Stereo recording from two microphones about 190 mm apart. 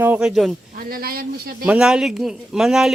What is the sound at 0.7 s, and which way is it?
Speech, 50° right (ahead or behind).